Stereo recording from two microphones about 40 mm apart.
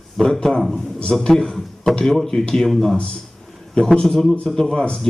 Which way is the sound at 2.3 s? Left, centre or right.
Left.